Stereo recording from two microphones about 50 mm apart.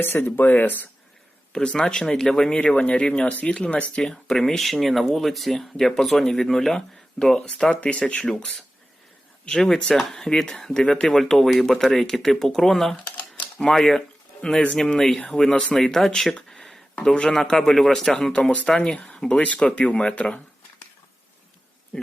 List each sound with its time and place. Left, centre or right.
0.0 s speech: left
1.5 s speech: centre
3.9 s speech: centre
21.9 s speech: centre